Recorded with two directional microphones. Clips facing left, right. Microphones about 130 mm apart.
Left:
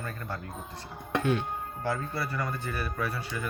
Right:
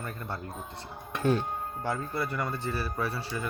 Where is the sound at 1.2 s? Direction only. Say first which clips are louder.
Right 2 dB; 40° right (ahead or behind).